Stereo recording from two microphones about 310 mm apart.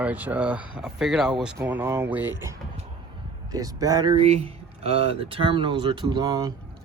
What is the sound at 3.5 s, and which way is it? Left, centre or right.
Speech, centre.